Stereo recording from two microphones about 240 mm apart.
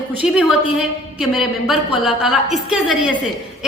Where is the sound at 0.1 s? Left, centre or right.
Centre.